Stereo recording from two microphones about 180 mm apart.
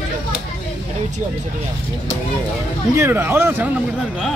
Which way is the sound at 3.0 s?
10° right (ahead or behind).